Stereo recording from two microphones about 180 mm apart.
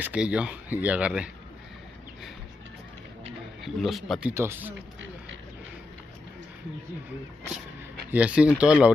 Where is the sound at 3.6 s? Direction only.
Centre (ahead or behind).